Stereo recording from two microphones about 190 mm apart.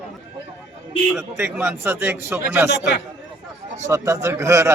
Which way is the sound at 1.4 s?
10° right (ahead or behind).